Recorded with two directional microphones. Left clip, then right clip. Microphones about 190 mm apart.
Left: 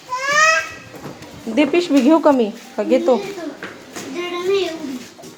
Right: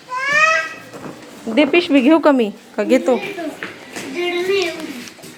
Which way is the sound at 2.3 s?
20° right (ahead or behind).